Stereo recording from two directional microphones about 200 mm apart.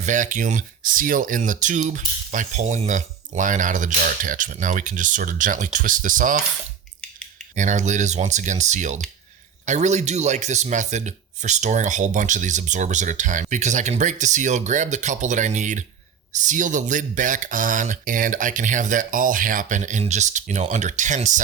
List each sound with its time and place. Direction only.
0.0 s speech: 40° right (ahead or behind)
7.5 s speech: 35° right (ahead or behind)